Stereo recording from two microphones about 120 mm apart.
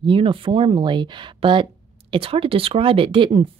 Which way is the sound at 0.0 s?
45° right (ahead or behind).